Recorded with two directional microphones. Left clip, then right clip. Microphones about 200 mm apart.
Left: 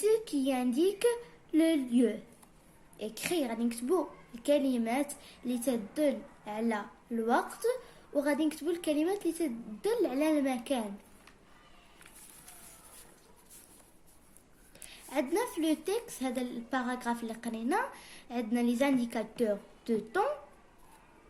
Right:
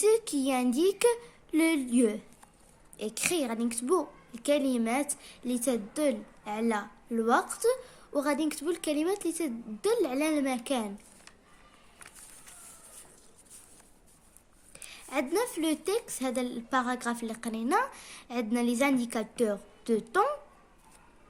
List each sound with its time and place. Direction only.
0.0 s a woman's voice: 45° right (ahead or behind)
14.8 s a woman's voice: 45° right (ahead or behind)